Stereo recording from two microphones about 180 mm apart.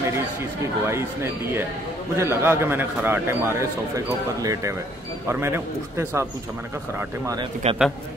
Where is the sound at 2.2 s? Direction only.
15° right (ahead or behind).